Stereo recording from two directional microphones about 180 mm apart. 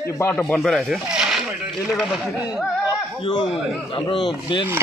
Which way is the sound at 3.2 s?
30° left (ahead or behind).